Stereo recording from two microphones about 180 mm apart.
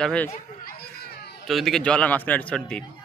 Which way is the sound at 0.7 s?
60° left (ahead or behind).